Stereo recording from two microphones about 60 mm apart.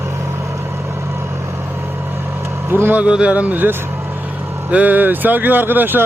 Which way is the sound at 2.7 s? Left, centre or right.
Right.